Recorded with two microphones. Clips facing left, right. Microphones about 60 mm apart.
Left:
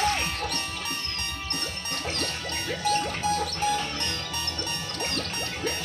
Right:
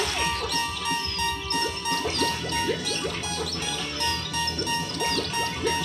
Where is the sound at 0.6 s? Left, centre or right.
Right.